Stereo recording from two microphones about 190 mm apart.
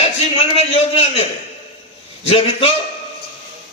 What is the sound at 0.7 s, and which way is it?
A man's voice, 35° left (ahead or behind).